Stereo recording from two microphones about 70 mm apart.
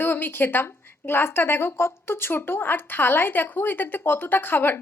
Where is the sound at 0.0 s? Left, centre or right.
Left.